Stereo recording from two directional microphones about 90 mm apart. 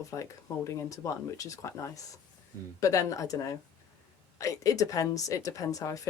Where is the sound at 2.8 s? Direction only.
40° left (ahead or behind).